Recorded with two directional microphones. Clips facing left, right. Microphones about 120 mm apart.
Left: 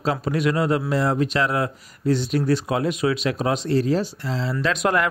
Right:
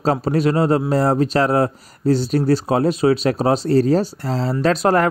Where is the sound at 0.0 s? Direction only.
35° right (ahead or behind).